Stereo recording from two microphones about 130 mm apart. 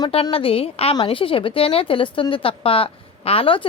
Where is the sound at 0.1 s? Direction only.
45° left (ahead or behind).